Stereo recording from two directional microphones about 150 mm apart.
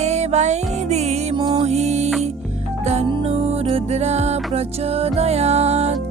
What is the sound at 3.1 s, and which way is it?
Music, 40° right (ahead or behind).